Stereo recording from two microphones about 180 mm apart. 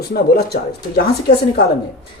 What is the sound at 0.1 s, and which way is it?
Speech, 60° left (ahead or behind).